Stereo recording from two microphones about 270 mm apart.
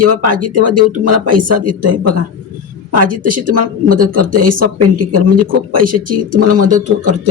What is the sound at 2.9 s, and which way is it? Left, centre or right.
Speech, right.